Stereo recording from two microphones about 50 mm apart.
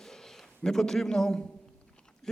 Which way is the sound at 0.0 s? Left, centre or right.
Centre.